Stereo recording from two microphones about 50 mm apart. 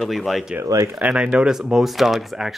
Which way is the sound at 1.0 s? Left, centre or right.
Right.